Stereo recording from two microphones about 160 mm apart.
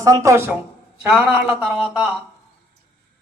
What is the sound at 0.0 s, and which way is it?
Speech, 20° right (ahead or behind).